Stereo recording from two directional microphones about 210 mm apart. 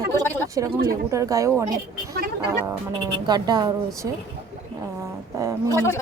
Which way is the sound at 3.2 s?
20° right (ahead or behind).